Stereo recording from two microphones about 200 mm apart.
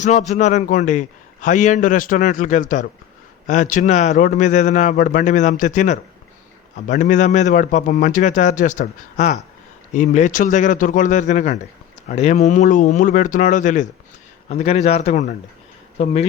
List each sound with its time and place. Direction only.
0.0 s a man's voice: 35° left (ahead or behind)